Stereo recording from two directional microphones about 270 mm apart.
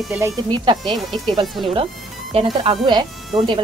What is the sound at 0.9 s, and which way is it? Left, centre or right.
Speech, centre.